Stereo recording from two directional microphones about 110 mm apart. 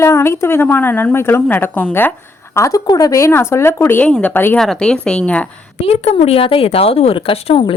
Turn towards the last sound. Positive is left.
turn(degrees=50)  # may be behind; listen again after turning